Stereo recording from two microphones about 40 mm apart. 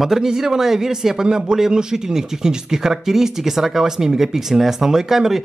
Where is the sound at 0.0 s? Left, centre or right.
Centre.